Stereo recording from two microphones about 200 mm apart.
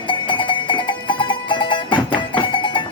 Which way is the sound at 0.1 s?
25° left (ahead or behind).